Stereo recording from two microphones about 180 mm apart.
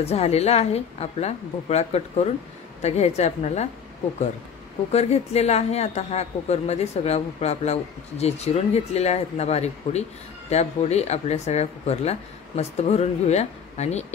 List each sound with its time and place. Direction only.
0.0 s speech: 35° left (ahead or behind)
4.9 s speech: 35° left (ahead or behind)